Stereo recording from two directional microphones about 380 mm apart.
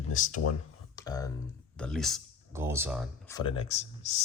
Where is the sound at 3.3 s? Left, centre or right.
Centre.